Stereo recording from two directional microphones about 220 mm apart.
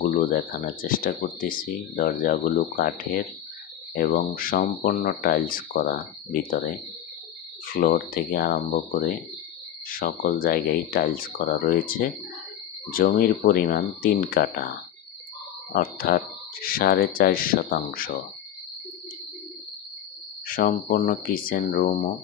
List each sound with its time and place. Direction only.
0.0 s speech: 40° left (ahead or behind)
7.6 s speech: 40° left (ahead or behind)
15.7 s speech: 40° left (ahead or behind)
20.4 s speech: 40° left (ahead or behind)